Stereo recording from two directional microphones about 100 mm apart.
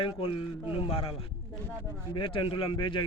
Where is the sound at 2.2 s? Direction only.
55° left (ahead or behind).